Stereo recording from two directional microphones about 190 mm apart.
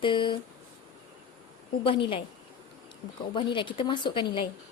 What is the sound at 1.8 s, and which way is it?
Speech, 25° left (ahead or behind).